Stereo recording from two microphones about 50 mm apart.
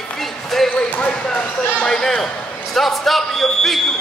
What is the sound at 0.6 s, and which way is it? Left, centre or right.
Speech, left.